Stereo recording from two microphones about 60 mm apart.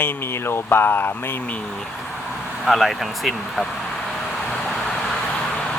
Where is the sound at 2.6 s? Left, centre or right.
Centre.